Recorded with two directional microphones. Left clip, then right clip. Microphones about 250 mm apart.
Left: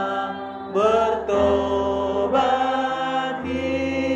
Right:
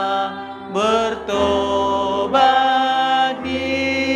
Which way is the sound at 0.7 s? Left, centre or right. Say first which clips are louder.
Right 1 dB; right.